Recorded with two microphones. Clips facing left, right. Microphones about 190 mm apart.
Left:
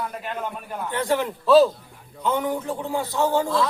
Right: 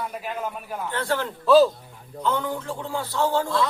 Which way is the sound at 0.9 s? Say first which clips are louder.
Left 4 dB; 15° left (ahead or behind).